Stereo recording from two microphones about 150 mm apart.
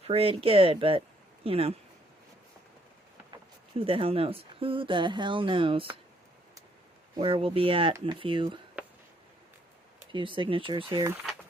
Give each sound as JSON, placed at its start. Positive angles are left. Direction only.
{"t": 0.0, "sound": "speech", "side_deg": -40}
{"t": 3.8, "sound": "speech", "side_deg": -35}
{"t": 7.2, "sound": "speech", "side_deg": -35}
{"t": 8.8, "sound": "a sound", "side_deg": -10}
{"t": 10.1, "sound": "speech", "side_deg": -35}